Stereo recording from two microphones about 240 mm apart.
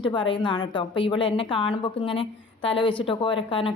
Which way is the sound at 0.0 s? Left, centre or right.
Centre.